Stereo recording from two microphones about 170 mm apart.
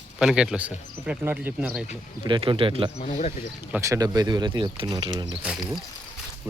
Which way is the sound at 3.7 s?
15° right (ahead or behind).